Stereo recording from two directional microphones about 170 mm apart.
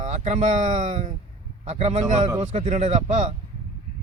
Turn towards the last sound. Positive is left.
turn(degrees=-40)  # may be behind; listen again after turning